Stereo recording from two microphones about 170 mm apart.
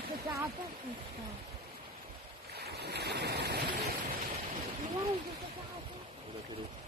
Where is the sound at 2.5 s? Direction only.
75° right (ahead or behind).